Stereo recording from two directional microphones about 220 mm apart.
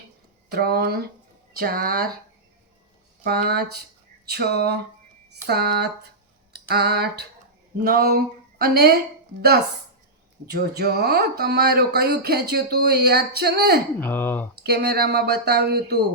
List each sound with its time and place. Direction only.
0.5 s speech: 45° right (ahead or behind)
3.2 s speech: 45° right (ahead or behind)
6.5 s a sound: 45° right (ahead or behind)
7.9 s speech: 45° right (ahead or behind)
10.4 s speech: 45° right (ahead or behind)
14.0 s speech: 10° left (ahead or behind)
14.6 s speech: 45° right (ahead or behind)